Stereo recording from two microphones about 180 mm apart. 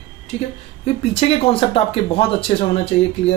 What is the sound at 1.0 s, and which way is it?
Speech, 35° left (ahead or behind).